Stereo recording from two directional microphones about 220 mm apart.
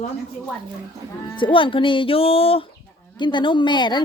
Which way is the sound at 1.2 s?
20° left (ahead or behind).